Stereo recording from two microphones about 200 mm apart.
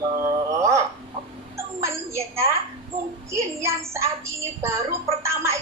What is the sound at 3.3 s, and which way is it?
A woman's voice, 15° right (ahead or behind).